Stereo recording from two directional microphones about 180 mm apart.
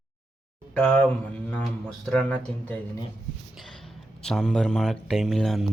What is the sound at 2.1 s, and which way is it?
Speech, 10° left (ahead or behind).